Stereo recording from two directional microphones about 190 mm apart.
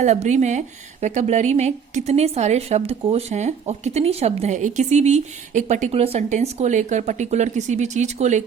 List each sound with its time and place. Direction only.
0.0 s a woman's voice: 35° right (ahead or behind)